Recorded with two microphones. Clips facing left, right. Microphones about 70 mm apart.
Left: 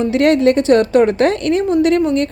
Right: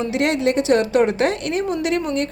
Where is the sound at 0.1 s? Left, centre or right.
Left.